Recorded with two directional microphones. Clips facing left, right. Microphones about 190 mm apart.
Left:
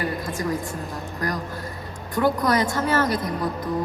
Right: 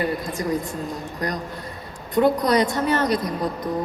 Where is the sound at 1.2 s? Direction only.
20° right (ahead or behind).